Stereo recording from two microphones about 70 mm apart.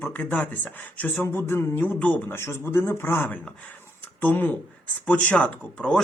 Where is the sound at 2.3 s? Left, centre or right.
Left.